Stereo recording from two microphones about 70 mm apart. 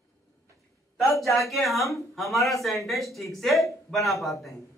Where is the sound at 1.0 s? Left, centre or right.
Left.